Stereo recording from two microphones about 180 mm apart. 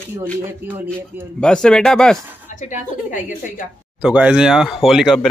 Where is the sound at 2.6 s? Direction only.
45° left (ahead or behind).